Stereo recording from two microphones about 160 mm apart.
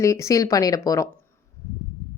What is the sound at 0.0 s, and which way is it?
Speech, 20° left (ahead or behind).